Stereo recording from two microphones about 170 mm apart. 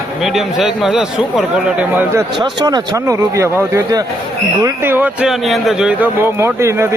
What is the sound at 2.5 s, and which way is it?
Speech, 25° right (ahead or behind).